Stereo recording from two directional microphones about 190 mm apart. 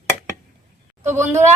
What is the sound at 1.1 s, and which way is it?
Speech, 15° right (ahead or behind).